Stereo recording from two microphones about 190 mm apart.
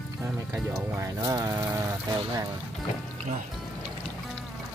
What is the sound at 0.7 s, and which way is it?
Vehicle, 15° right (ahead or behind).